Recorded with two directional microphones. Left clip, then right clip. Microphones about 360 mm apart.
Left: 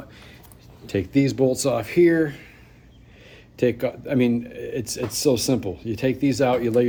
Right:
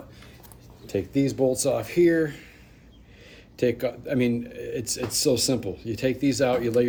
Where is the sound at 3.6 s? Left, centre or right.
Centre.